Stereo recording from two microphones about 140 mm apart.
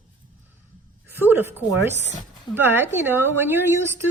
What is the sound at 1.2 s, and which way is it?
A woman's voice, 15° right (ahead or behind).